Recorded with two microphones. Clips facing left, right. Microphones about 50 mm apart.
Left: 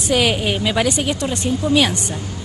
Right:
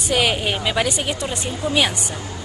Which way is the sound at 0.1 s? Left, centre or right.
Centre.